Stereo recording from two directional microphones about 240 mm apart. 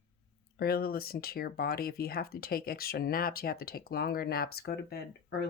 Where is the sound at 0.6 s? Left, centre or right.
Left.